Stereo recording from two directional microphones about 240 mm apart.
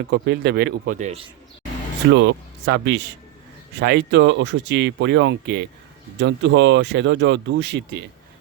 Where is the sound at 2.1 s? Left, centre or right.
Right.